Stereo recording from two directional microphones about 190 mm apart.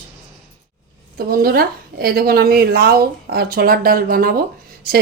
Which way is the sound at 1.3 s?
55° right (ahead or behind).